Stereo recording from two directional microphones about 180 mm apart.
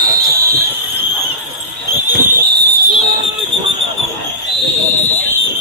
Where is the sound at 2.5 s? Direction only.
60° right (ahead or behind).